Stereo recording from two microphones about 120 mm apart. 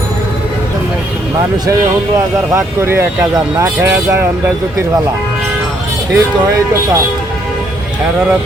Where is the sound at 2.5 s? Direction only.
20° right (ahead or behind).